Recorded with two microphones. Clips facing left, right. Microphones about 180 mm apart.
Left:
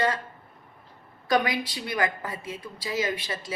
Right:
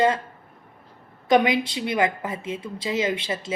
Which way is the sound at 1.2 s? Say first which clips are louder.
Right 6 dB; 20° right (ahead or behind).